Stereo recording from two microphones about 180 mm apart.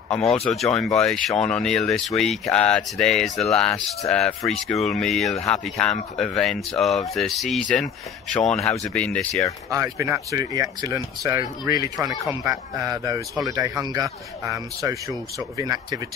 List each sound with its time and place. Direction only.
0.5 s speech: centre (ahead or behind)
9.7 s speech: 15° right (ahead or behind)